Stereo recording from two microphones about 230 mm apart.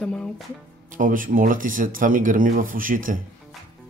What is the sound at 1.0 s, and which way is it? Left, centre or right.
Speech, right.